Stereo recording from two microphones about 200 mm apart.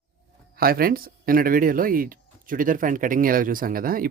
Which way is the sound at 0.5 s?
50° right (ahead or behind).